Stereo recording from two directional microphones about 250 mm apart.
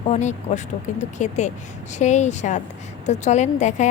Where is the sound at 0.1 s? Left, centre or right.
Left.